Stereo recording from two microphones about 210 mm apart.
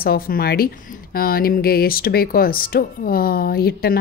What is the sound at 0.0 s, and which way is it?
Speech, 45° left (ahead or behind).